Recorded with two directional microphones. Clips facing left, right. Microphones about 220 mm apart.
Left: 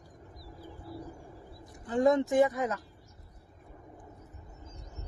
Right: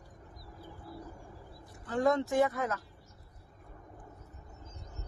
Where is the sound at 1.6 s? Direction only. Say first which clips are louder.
Left 3 dB; 15° left (ahead or behind).